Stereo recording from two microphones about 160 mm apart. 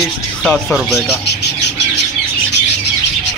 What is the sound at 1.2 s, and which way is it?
Bird, 90° left.